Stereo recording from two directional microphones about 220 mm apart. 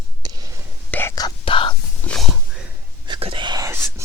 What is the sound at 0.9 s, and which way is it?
Whispering, 10° left (ahead or behind).